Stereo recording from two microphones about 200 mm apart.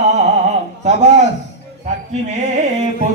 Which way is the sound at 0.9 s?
35° right (ahead or behind).